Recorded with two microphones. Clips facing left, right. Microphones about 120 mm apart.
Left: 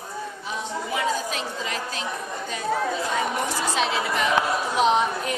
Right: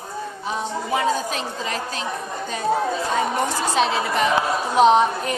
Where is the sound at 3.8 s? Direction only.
40° right (ahead or behind).